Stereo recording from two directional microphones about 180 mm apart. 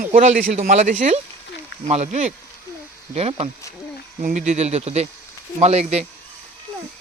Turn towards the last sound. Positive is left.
turn(degrees=-35)  # may be behind; listen again after turning